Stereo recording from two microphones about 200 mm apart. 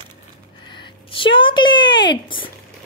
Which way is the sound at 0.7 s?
25° left (ahead or behind).